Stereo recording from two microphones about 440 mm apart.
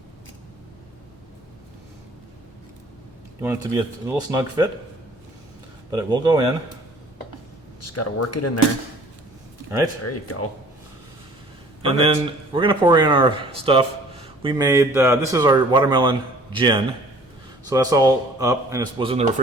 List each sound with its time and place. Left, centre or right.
3.4 s speech: centre
5.9 s speech: centre
7.8 s speech: left
10.0 s speech: left
11.8 s speech: centre